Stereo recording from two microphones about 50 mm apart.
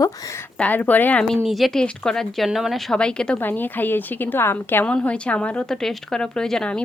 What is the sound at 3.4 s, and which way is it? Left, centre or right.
A woman's voice, left.